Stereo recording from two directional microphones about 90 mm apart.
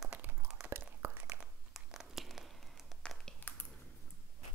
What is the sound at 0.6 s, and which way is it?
Whispering, 25° right (ahead or behind).